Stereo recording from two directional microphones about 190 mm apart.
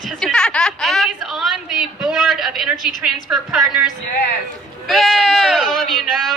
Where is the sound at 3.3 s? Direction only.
5° right (ahead or behind).